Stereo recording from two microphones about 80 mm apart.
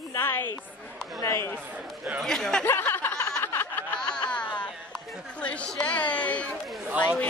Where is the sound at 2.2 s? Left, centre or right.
Centre.